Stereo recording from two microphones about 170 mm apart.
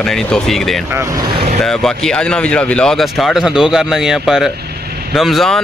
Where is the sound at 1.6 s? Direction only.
5° left (ahead or behind).